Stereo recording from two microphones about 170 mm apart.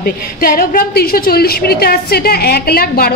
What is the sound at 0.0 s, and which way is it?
A woman's voice, 60° left (ahead or behind).